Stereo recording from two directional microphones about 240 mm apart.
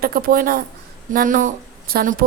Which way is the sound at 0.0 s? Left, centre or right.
Right.